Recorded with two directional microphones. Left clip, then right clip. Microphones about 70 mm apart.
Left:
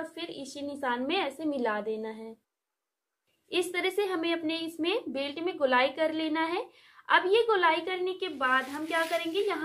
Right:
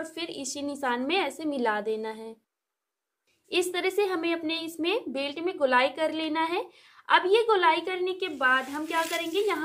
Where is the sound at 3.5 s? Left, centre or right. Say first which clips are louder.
Right 2 dB; centre.